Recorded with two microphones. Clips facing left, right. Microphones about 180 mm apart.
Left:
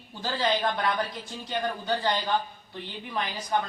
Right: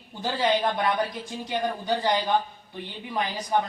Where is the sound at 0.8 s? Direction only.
15° right (ahead or behind).